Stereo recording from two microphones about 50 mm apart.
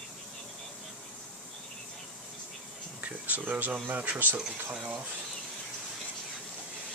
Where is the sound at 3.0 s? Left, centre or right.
Right.